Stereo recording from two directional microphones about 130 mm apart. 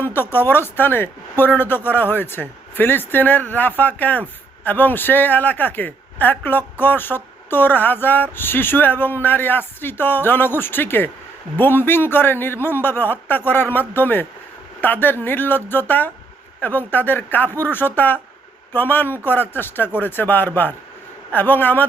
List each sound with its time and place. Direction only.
0.0 s speech: 15° left (ahead or behind)